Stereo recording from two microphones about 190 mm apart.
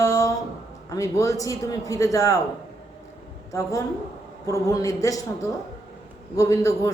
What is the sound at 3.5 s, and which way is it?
A woman's voice, 15° left (ahead or behind).